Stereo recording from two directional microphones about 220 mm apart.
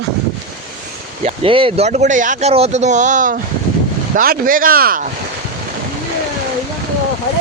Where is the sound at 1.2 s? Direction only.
25° right (ahead or behind); by 5.0 s 40° right (ahead or behind).